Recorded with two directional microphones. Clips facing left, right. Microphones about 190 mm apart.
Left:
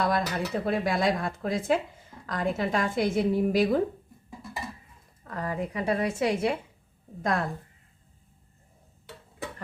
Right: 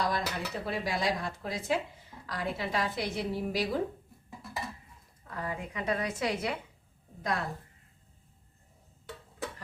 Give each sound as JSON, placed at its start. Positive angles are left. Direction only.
{"t": 0.0, "sound": "speech", "side_deg": 55}
{"t": 4.3, "sound": "a sound", "side_deg": 0}
{"t": 5.3, "sound": "a woman's voice", "side_deg": 45}
{"t": 7.2, "sound": "speech", "side_deg": 50}